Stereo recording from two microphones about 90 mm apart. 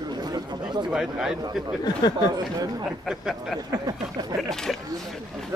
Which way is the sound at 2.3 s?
45° right (ahead or behind).